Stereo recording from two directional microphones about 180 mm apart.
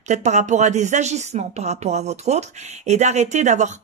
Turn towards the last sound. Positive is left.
turn(degrees=-40)  # may be behind; listen again after turning